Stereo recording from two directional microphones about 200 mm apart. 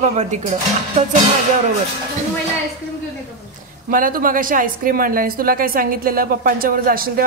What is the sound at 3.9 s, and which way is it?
A woman's voice, 45° right (ahead or behind).